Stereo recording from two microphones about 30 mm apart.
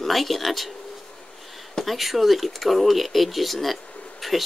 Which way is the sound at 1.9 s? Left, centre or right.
Centre.